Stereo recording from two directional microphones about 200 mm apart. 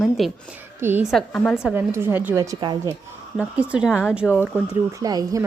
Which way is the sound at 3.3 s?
5° right (ahead or behind).